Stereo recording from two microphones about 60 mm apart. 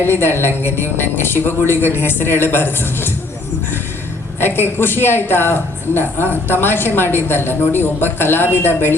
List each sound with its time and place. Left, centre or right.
0.0 s speech: left
4.4 s speech: left